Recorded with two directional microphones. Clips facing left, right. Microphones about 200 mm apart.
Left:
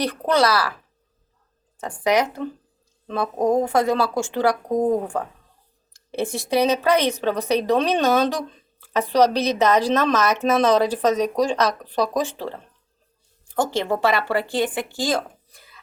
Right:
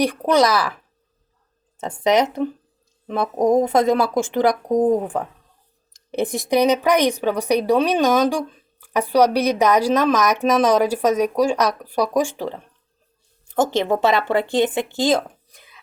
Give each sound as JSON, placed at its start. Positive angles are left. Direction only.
{"t": 0.0, "sound": "speech", "side_deg": -15}
{"t": 1.8, "sound": "speech", "side_deg": -20}